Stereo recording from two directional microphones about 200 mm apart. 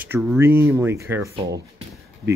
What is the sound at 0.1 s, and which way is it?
Speech, 10° right (ahead or behind).